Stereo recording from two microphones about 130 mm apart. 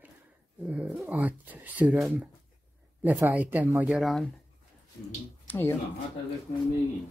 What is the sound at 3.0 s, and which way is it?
Speech, 15° right (ahead or behind).